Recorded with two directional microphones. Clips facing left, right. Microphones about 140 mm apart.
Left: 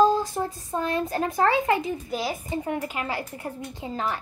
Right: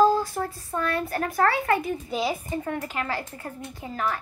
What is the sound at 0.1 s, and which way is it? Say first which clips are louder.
Speech: even; 20° left (ahead or behind).